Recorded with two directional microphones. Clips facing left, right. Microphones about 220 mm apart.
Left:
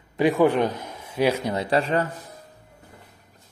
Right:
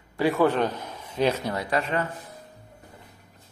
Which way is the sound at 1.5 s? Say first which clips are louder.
Left 4 dB; 30° left (ahead or behind).